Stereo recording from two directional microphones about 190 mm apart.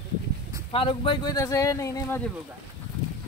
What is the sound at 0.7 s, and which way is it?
Speech, 25° left (ahead or behind).